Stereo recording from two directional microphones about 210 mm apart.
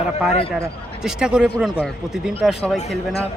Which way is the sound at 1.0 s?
5° right (ahead or behind).